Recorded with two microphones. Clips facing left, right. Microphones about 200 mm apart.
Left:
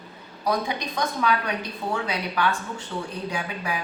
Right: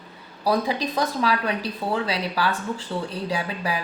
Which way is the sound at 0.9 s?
35° right (ahead or behind).